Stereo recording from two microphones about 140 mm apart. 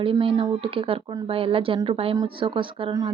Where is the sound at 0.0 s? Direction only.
40° right (ahead or behind).